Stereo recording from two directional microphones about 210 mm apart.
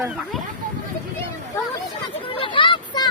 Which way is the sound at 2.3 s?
25° left (ahead or behind).